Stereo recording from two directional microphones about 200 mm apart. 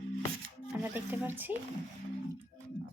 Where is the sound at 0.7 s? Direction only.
10° right (ahead or behind).